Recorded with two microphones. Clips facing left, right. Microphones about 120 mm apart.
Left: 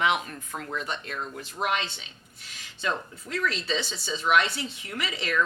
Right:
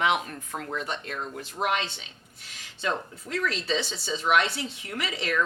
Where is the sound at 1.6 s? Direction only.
55° right (ahead or behind).